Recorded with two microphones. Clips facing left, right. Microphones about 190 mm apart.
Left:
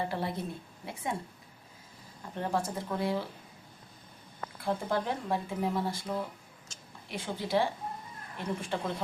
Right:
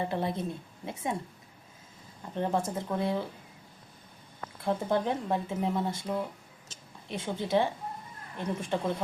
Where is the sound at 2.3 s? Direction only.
20° right (ahead or behind).